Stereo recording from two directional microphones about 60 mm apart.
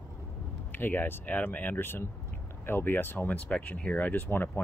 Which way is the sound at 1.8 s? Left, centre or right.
Left.